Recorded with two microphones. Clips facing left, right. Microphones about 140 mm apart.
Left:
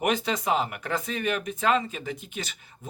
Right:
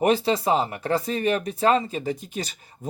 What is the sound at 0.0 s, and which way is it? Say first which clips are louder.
Speech: right 6 dB; 30° right (ahead or behind).